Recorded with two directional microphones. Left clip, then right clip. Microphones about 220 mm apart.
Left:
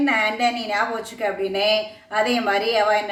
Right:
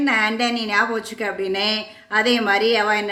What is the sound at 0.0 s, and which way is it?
Speech, 45° right (ahead or behind).